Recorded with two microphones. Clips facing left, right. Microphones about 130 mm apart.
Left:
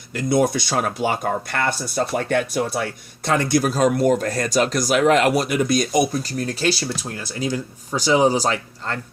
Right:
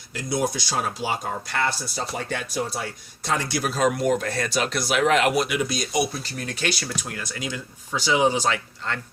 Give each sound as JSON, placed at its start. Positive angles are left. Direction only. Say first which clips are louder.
{"t": 0.1, "sound": "speech", "louder": "left 7 dB", "side_deg": 55}